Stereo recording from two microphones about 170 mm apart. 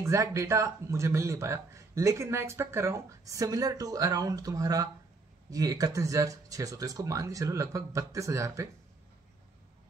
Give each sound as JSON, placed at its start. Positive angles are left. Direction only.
{"t": 0.0, "sound": "speech", "side_deg": -15}